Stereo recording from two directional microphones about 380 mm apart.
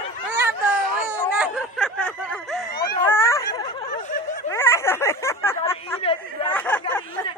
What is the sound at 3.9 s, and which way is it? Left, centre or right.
Snicker, left.